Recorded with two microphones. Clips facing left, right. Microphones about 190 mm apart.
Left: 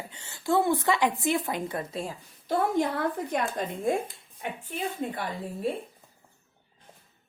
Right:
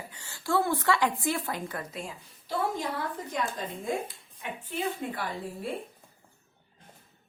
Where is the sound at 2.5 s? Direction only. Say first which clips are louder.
Left 5 dB; 55° left (ahead or behind).